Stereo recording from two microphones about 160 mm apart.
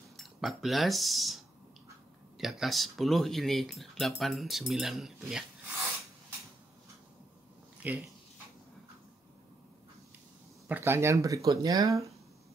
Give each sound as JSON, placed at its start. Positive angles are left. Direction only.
{"t": 0.2, "sound": "speech", "side_deg": 0}
{"t": 7.8, "sound": "speech", "side_deg": -10}
{"t": 10.7, "sound": "speech", "side_deg": -15}